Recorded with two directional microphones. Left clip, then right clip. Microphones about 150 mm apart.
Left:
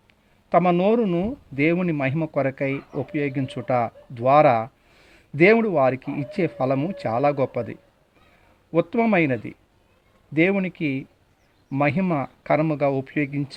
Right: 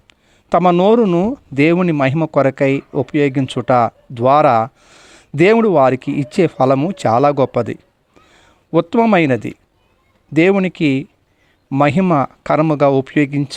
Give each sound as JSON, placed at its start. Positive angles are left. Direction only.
{"t": 0.1, "sound": "speech", "side_deg": -40}